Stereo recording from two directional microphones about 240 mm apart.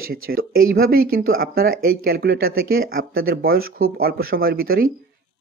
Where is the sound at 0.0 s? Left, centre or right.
Right.